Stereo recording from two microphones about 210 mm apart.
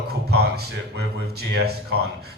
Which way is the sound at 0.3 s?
50° right (ahead or behind).